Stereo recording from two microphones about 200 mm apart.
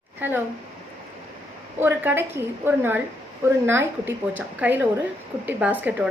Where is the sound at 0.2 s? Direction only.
10° right (ahead or behind).